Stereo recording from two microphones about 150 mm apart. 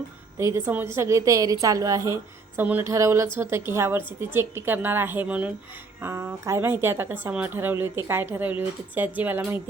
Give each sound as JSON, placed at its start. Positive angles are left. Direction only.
{"t": 0.3, "sound": "a woman's voice", "side_deg": -20}